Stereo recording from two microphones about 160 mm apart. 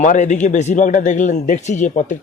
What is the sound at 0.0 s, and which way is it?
A man's voice, 50° left (ahead or behind).